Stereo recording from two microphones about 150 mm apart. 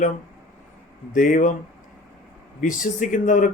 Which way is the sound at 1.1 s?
60° left (ahead or behind).